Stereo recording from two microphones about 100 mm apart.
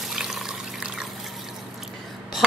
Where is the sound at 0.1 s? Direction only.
5° right (ahead or behind).